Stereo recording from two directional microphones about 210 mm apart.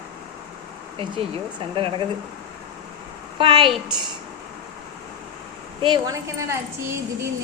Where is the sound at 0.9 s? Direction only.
25° right (ahead or behind).